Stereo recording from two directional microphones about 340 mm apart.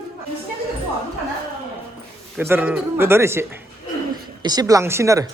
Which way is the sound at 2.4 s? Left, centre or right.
Centre.